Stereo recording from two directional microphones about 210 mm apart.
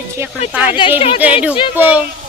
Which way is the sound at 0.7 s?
25° left (ahead or behind).